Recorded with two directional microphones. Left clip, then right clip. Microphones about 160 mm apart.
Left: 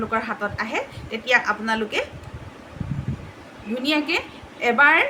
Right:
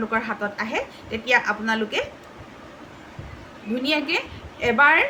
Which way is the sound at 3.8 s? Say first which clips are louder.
Left 1 dB; 10° left (ahead or behind).